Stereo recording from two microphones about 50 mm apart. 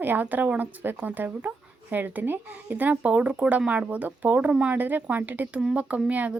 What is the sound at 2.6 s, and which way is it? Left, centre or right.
Speech, right.